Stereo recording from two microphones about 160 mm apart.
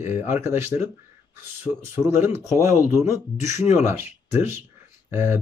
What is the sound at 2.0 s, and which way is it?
Speech, 15° right (ahead or behind).